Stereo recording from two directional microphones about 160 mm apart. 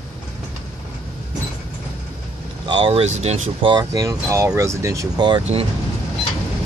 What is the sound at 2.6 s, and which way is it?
Speech, 30° right (ahead or behind).